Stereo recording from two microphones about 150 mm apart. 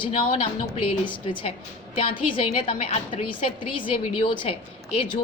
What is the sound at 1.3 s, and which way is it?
A woman's voice, 35° left (ahead or behind).